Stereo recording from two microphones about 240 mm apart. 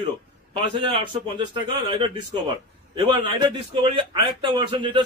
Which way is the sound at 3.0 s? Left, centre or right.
Centre.